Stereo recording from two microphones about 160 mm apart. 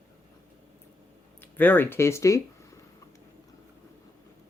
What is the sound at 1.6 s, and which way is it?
Speech, 10° left (ahead or behind).